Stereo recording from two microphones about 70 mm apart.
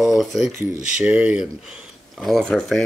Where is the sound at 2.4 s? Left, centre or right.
Centre.